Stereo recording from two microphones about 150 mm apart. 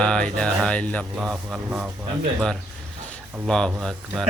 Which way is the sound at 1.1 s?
5° right (ahead or behind).